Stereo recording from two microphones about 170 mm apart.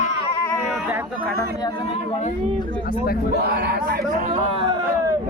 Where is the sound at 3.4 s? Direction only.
65° right (ahead or behind).